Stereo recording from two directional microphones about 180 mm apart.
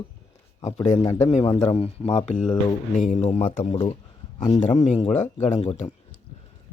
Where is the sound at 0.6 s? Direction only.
25° left (ahead or behind).